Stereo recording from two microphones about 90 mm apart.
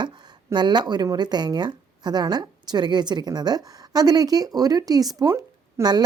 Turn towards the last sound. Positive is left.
turn(degrees=-50)  # may be behind; listen again after turning